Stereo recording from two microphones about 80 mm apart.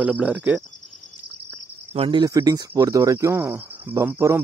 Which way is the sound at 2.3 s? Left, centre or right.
Right.